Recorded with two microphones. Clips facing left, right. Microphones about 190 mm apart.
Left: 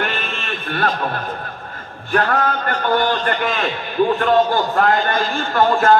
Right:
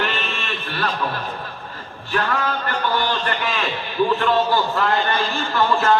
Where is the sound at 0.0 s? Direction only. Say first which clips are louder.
Left 1 dB; 45° left (ahead or behind).